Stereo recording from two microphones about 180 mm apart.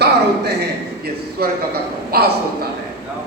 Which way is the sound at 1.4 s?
55° right (ahead or behind).